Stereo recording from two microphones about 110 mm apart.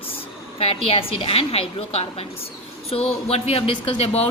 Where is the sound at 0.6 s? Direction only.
60° left (ahead or behind).